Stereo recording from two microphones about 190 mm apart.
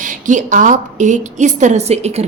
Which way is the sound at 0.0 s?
40° right (ahead or behind).